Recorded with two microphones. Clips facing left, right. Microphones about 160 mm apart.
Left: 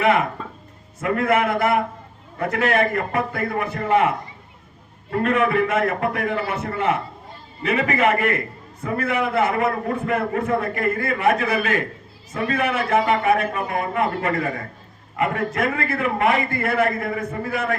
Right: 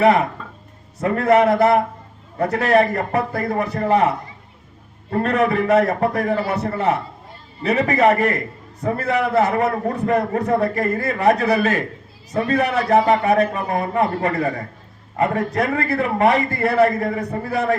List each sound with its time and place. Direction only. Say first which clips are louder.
0.0 s a man's voice: right 4 dB; 35° right (ahead or behind)
5.2 s a man's voice: right 1 dB; 35° right (ahead or behind)